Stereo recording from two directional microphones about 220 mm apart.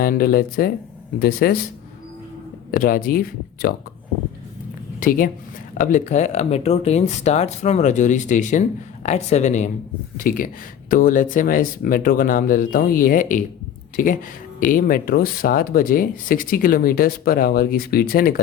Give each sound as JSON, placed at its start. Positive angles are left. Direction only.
{"t": 0.0, "sound": "speech", "side_deg": 40}
{"t": 2.7, "sound": "speech", "side_deg": 40}
{"t": 4.9, "sound": "speech", "side_deg": 40}